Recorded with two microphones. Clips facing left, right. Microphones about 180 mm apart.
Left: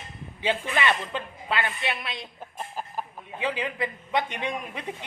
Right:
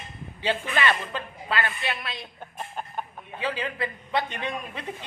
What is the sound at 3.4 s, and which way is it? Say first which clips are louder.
A man's voice: left 1 dB; 20° left (ahead or behind).